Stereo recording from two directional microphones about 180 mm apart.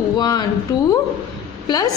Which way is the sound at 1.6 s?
20° left (ahead or behind).